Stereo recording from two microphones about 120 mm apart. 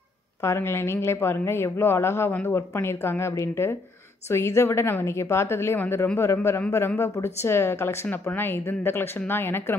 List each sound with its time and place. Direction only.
0.4 s speech: 20° left (ahead or behind)